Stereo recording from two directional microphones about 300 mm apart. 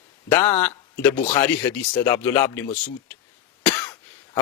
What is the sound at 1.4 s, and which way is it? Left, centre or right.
Speech, centre.